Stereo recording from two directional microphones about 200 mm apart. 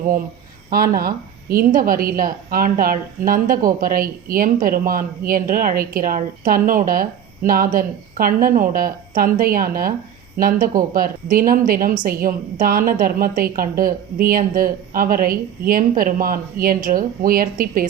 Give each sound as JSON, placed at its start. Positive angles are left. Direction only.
{"t": 0.7, "sound": "a woman's voice", "side_deg": -45}